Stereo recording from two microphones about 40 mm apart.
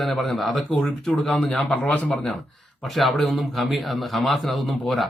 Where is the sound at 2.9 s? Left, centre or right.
Centre.